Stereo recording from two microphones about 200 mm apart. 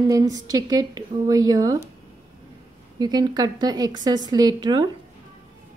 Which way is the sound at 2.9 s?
20° right (ahead or behind).